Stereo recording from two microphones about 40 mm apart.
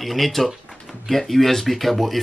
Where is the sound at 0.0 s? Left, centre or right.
Centre.